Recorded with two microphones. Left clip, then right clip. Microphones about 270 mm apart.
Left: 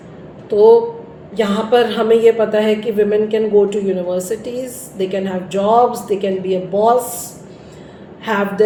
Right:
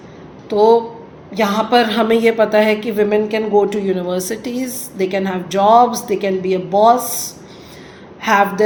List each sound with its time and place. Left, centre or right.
0.5 s a woman's voice: right
8.2 s a woman's voice: right